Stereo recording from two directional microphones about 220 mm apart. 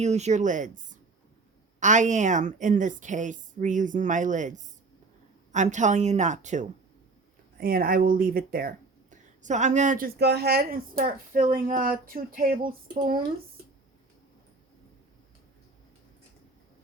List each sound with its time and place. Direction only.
0.0 s speech: 30° right (ahead or behind)
10.2 s speech: 50° right (ahead or behind)